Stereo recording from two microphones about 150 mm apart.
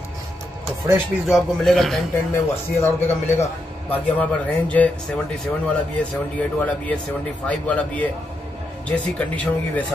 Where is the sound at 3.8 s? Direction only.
10° left (ahead or behind).